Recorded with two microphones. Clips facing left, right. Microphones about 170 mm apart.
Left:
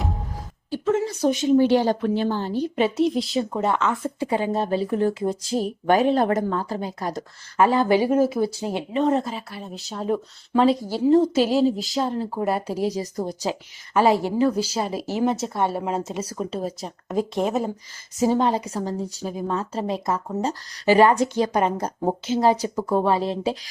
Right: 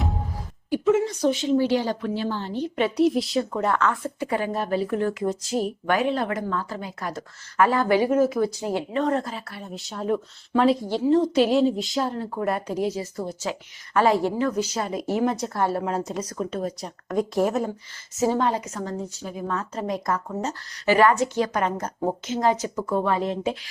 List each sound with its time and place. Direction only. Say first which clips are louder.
1.0 s speech: left 1 dB; 10° left (ahead or behind)
1.4 s a woman's voice: left 8 dB; 55° left (ahead or behind)
2.7 s speech: left 2 dB; 30° left (ahead or behind)
3.0 s speech: right 5 dB; centre (ahead or behind)
3.5 s a woman's voice: left 1 dB; 20° left (ahead or behind)
9.5 s speech: left 2 dB; centre (ahead or behind)
12.4 s a woman's voice: even; 30° left (ahead or behind)